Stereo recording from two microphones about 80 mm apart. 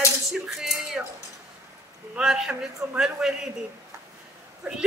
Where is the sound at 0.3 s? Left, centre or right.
Centre.